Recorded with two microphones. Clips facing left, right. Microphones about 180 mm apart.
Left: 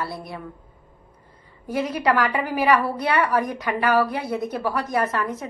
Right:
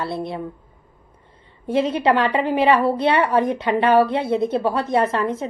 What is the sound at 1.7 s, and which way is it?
A woman's voice, 25° right (ahead or behind).